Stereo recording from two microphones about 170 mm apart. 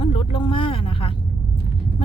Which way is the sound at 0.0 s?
35° left (ahead or behind).